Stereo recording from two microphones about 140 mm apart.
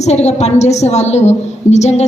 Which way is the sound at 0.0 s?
50° left (ahead or behind).